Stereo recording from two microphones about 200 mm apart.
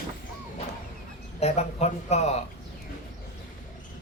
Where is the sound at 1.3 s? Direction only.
35° left (ahead or behind).